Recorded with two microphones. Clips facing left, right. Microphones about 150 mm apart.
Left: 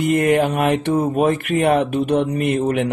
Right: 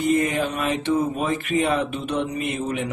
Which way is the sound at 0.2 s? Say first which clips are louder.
Left 7 dB; 60° left (ahead or behind).